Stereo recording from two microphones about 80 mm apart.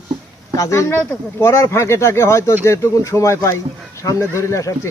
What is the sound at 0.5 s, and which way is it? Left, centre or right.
Speech, left.